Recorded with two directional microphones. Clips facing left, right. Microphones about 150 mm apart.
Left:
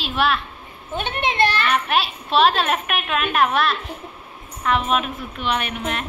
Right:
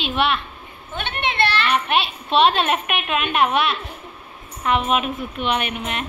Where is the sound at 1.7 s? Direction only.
Centre (ahead or behind).